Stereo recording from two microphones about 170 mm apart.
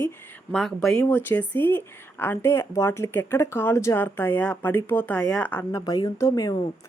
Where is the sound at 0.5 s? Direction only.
5° left (ahead or behind).